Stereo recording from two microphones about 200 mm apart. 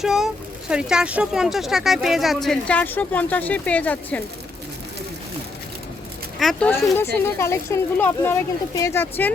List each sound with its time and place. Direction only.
0.0 s speech: centre (ahead or behind)
6.4 s speech: 5° left (ahead or behind)